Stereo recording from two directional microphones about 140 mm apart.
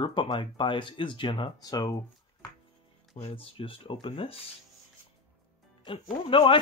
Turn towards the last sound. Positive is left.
turn(degrees=40)  # may be behind; listen again after turning